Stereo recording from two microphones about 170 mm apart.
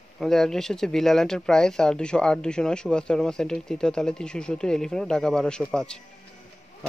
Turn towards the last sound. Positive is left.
turn(degrees=5)  # may be behind; listen again after turning